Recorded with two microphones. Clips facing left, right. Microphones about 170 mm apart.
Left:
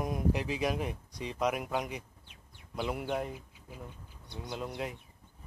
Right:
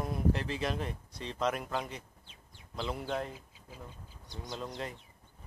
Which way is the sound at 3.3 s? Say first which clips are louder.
Left 3 dB; 60° left (ahead or behind).